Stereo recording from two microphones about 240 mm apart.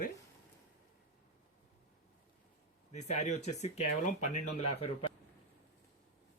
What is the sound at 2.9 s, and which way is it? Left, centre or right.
Speech, left.